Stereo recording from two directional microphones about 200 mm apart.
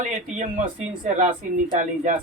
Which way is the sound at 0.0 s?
35° right (ahead or behind).